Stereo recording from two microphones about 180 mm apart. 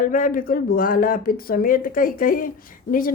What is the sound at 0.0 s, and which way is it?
Speech, 50° left (ahead or behind).